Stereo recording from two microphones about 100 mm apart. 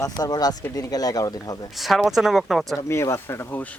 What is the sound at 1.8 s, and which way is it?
Speech, centre (ahead or behind).